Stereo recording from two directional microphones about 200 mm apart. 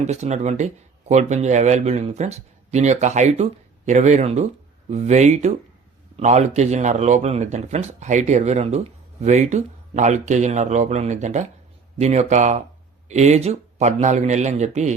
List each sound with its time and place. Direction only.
0.0 s speech: 35° right (ahead or behind)